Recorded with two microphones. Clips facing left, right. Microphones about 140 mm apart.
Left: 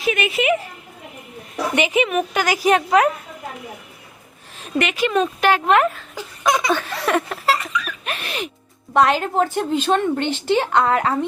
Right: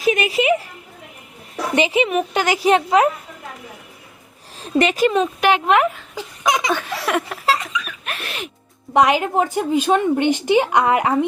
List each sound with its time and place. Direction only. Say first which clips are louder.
0.0 s speech: right 2 dB; 30° right (ahead or behind)
1.7 s a woman's voice: right 2 dB; 30° right (ahead or behind)
4.6 s speech: right 4 dB; 35° right (ahead or behind)
5.1 s speech: right 1 dB; 15° right (ahead or behind)
8.9 s a woman's voice: right 1 dB; 15° right (ahead or behind)